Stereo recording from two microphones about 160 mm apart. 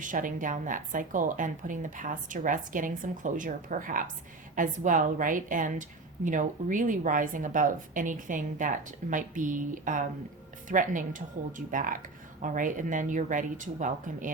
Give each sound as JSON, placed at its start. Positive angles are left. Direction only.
{"t": 0.0, "sound": "a woman's voice", "side_deg": -55}